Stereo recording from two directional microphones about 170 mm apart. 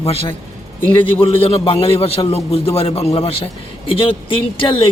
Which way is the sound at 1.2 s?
35° left (ahead or behind).